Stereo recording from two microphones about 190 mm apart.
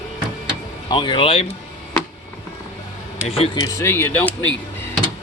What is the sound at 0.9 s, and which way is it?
Speech, 25° left (ahead or behind).